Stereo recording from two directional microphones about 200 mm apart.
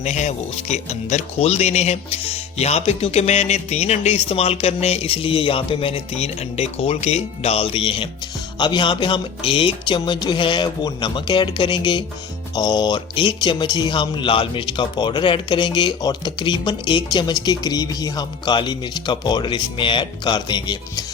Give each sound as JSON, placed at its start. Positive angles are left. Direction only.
{"t": 0.0, "sound": "speech", "side_deg": 35}